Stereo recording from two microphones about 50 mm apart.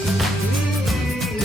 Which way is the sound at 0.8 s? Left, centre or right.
Centre.